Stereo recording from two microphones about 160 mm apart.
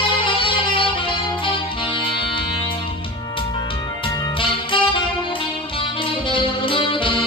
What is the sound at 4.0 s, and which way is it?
Music, 30° left (ahead or behind).